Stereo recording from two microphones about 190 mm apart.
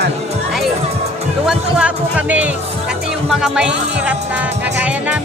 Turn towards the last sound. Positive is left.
turn(degrees=-5)  # may be behind; listen again after turning